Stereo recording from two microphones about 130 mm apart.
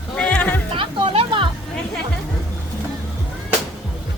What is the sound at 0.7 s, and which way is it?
Speech, 40° right (ahead or behind).